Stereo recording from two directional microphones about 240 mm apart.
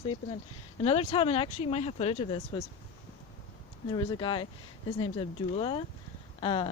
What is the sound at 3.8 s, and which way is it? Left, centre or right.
Speech, centre.